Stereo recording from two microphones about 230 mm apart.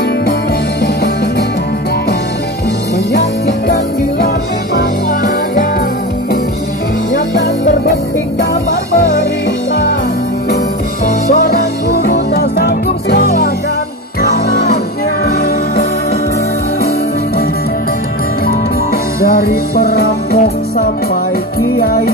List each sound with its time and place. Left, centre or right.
3.1 s music: left
11.3 s music: left
19.2 s music: left